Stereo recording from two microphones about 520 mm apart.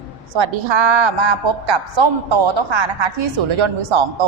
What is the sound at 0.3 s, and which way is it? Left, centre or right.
A woman's voice, right.